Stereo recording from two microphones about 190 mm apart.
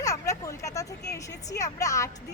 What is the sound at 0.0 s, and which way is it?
Speech, 15° left (ahead or behind).